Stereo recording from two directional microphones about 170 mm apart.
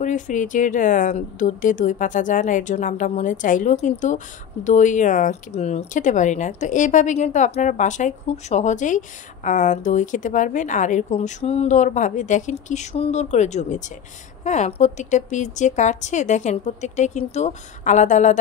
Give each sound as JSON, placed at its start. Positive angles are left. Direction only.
{"t": 0.0, "sound": "speech", "side_deg": 45}